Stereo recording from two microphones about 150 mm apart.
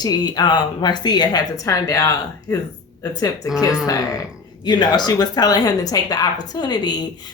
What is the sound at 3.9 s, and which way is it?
Speech, 25° left (ahead or behind).